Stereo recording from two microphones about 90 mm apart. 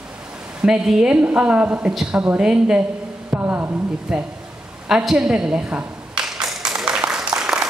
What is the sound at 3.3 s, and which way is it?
Speech, 20° right (ahead or behind).